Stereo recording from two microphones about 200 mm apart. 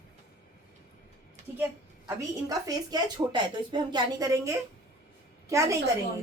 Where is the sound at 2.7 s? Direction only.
20° right (ahead or behind).